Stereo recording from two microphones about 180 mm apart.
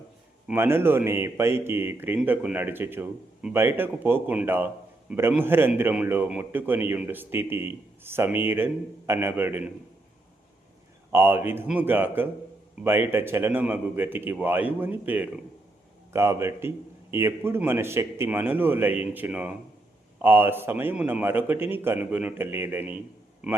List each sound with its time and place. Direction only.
0.4 s a man's voice: 10° right (ahead or behind)
11.1 s a man's voice: 10° right (ahead or behind)